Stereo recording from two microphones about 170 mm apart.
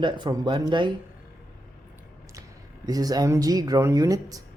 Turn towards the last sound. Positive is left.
turn(degrees=-20)  # may be behind; listen again after turning